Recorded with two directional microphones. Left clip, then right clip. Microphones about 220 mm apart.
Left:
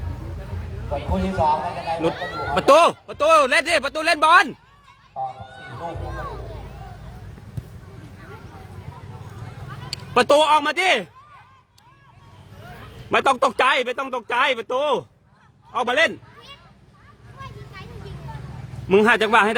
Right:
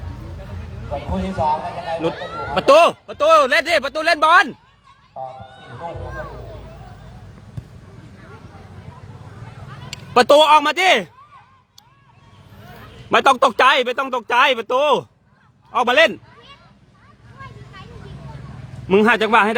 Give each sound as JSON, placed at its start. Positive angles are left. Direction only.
{"t": 1.1, "sound": "speech", "side_deg": -10}
{"t": 1.9, "sound": "speech", "side_deg": 0}
{"t": 2.1, "sound": "speech", "side_deg": 30}
{"t": 2.6, "sound": "speech", "side_deg": -5}
{"t": 9.9, "sound": "speech", "side_deg": -20}
{"t": 13.1, "sound": "speech", "side_deg": -20}
{"t": 18.9, "sound": "speech", "side_deg": -15}